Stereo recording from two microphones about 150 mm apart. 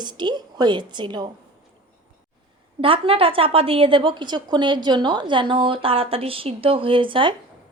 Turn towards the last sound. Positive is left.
turn(degrees=-35)  # may be behind; listen again after turning